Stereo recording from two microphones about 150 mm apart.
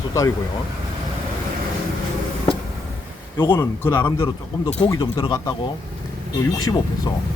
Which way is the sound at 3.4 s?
20° left (ahead or behind).